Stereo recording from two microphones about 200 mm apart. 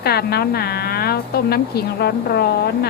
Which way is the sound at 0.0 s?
50° left (ahead or behind).